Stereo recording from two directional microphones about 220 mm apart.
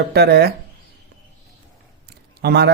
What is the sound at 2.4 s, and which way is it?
Speech, 50° right (ahead or behind).